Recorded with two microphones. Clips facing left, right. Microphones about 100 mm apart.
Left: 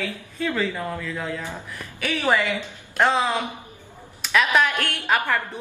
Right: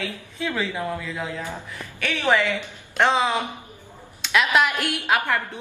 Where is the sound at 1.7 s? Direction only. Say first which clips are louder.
Left 4 dB; 5° left (ahead or behind).